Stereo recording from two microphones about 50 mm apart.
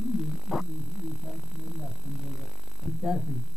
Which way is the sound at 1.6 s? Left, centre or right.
Centre.